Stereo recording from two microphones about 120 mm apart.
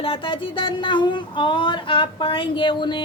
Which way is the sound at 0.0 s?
50° left (ahead or behind).